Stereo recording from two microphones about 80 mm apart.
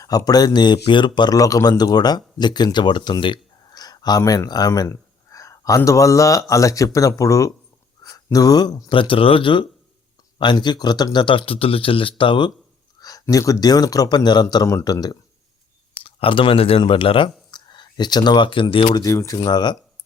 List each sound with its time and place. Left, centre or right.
0.3 s speech: left
1.4 s speech: left
2.7 s a sound: left
4.3 s speech: left
8.9 s speech: left
10.3 s speech: left
13.0 s a sound: left
13.3 s speech: left
14.5 s speech: left
16.3 s speech: left
17.5 s speech: left
19.0 s speech: left